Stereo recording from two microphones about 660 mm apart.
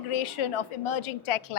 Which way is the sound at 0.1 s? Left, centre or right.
Left.